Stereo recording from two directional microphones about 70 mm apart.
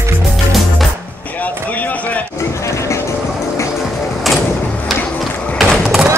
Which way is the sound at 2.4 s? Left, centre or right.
Left.